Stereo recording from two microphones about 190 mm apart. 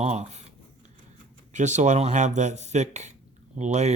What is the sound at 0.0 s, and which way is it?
Speech, 35° right (ahead or behind).